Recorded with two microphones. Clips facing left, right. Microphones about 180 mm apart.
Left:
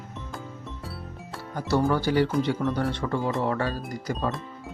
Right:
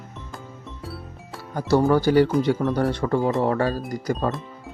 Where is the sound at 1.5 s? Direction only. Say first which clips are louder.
Right 5 dB; 40° right (ahead or behind).